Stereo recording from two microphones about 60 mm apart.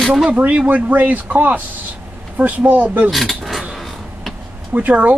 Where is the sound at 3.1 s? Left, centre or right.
Centre.